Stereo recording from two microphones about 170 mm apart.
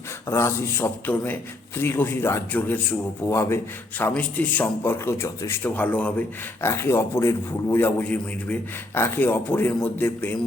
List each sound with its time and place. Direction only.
0.3 s a man's voice: 15° left (ahead or behind)